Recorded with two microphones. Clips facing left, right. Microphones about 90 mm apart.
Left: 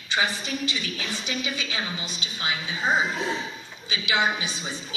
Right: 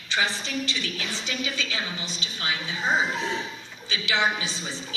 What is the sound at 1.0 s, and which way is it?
A woman's voice, 15° left (ahead or behind).